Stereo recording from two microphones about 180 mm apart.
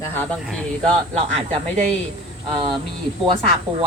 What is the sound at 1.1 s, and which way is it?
Speech, 35° right (ahead or behind).